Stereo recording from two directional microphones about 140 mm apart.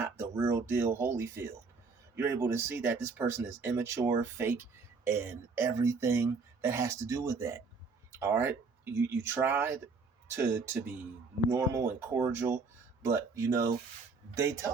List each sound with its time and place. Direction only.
0.0 s speech: 20° right (ahead or behind)